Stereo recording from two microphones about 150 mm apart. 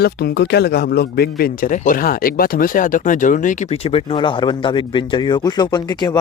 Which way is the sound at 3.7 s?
40° left (ahead or behind).